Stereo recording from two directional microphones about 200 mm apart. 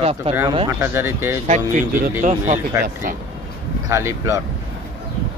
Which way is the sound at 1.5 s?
40° right (ahead or behind).